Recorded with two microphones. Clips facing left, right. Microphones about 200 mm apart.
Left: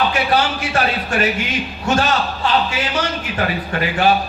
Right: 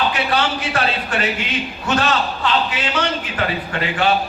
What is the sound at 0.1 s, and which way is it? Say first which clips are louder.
A man's voice: left 2 dB; 25° left (ahead or behind).